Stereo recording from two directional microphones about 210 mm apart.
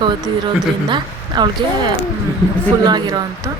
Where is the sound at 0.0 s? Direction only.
20° right (ahead or behind).